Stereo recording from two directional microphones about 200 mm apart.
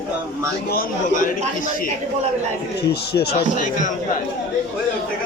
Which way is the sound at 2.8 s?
55° left (ahead or behind).